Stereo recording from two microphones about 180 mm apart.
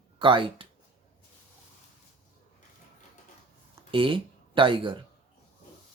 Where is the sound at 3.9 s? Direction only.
30° right (ahead or behind).